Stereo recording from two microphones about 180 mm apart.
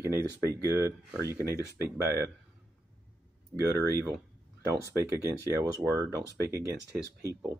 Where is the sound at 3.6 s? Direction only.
15° right (ahead or behind).